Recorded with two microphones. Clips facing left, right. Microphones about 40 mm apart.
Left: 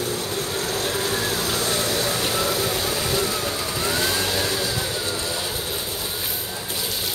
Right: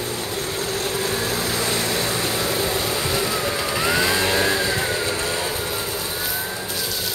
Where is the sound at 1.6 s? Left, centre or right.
Right.